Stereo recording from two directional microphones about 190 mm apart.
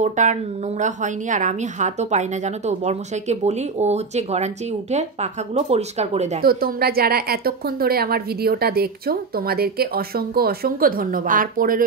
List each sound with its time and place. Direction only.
0.0 s a woman's voice: 40° right (ahead or behind)
6.4 s a woman's voice: 55° right (ahead or behind)